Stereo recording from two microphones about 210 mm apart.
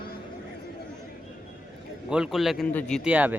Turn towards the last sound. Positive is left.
turn(degrees=-5)  # may be behind; listen again after turning